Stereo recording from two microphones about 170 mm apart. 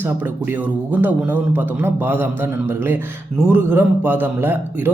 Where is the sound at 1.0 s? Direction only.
10° right (ahead or behind).